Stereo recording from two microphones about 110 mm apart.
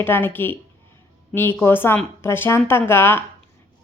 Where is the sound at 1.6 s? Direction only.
20° left (ahead or behind).